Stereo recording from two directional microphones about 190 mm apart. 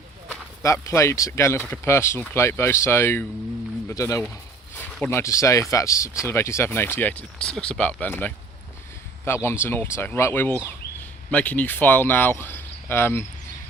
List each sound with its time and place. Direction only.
0.6 s speech: 15° left (ahead or behind)